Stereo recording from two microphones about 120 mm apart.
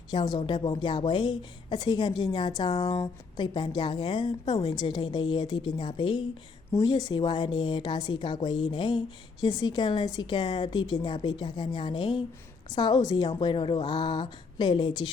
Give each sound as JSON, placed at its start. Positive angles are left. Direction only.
{"t": 0.1, "sound": "a woman's voice", "side_deg": 35}
{"t": 6.7, "sound": "a woman's voice", "side_deg": 30}